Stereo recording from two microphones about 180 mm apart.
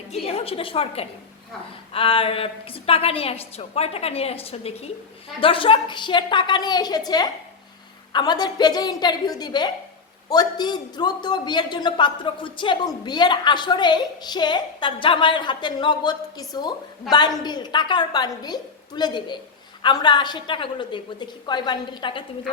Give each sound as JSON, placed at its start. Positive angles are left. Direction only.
{"t": 0.1, "sound": "a woman's voice", "side_deg": 35}